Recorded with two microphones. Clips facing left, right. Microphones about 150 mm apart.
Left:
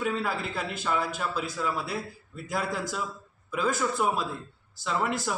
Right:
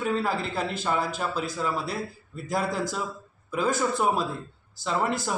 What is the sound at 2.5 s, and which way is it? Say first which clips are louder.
Speech: right 3 dB; 40° right (ahead or behind).